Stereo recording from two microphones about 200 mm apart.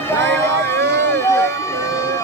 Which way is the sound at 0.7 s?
10° left (ahead or behind).